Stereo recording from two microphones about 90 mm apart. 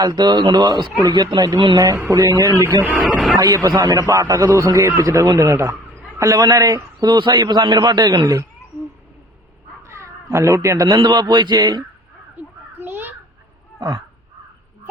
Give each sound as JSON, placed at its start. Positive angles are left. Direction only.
{"t": 0.0, "sound": "a man's voice", "side_deg": -50}
{"t": 1.4, "sound": "speech", "side_deg": -60}
{"t": 2.0, "sound": "a man's voice", "side_deg": -30}
{"t": 3.3, "sound": "a man's voice", "side_deg": -45}
{"t": 9.8, "sound": "cat", "side_deg": -30}
{"t": 10.8, "sound": "speech", "side_deg": -55}
{"t": 12.8, "sound": "children playing", "side_deg": -25}
{"t": 13.7, "sound": "a sound", "side_deg": -45}